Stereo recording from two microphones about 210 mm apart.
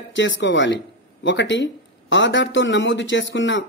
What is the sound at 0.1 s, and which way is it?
Speech, 60° left (ahead or behind).